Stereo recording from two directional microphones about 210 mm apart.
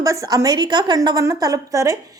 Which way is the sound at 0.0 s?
15° right (ahead or behind).